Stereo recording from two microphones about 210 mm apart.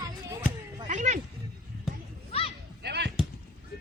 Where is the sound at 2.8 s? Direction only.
50° right (ahead or behind).